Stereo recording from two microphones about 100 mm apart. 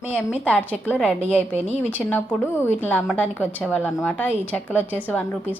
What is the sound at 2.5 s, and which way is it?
A woman's voice, 20° left (ahead or behind).